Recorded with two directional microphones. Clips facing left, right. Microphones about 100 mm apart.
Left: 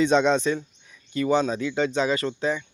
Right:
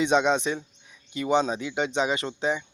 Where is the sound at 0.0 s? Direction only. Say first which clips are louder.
Left 2 dB; 15° right (ahead or behind).